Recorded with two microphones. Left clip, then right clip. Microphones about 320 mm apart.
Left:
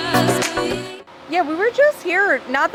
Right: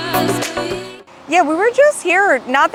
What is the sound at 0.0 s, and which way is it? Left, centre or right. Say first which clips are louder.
Music: even; centre.